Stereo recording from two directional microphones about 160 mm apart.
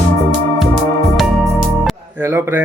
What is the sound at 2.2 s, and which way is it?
Speech, 15° right (ahead or behind).